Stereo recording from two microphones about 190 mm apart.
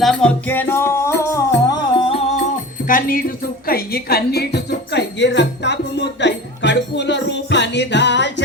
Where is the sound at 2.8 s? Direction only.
45° left (ahead or behind).